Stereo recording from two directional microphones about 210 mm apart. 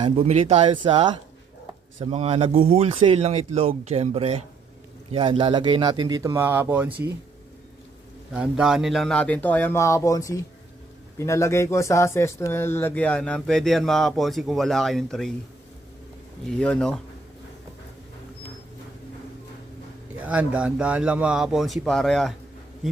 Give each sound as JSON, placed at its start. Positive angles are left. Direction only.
{"t": 0.0, "sound": "speech", "side_deg": -30}
{"t": 8.3, "sound": "speech", "side_deg": -5}
{"t": 16.5, "sound": "speech", "side_deg": 5}
{"t": 20.2, "sound": "speech", "side_deg": -5}